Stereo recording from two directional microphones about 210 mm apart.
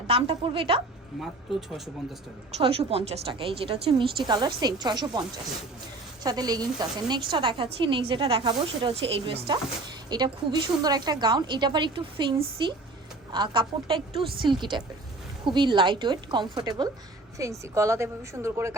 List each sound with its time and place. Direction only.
0.1 s a woman's voice: 25° right (ahead or behind)
2.6 s a woman's voice: 25° right (ahead or behind)
6.2 s a woman's voice: 20° right (ahead or behind)